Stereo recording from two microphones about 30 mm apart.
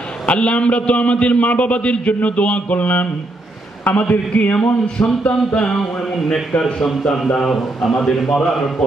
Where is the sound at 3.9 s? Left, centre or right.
Left.